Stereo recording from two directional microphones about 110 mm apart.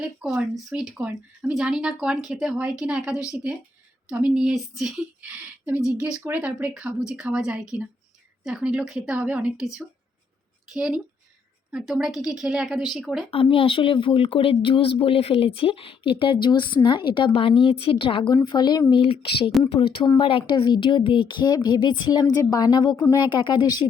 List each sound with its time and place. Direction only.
0.5 s speech: 5° right (ahead or behind)
5.2 s speech: 15° right (ahead or behind)
10.8 s speech: 10° right (ahead or behind)
13.3 s speech: 55° left (ahead or behind)
18.4 s speech: 40° left (ahead or behind)